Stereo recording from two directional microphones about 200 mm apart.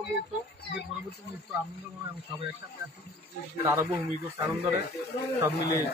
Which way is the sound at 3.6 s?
10° right (ahead or behind).